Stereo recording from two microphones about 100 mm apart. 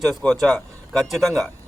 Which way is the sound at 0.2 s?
5° left (ahead or behind).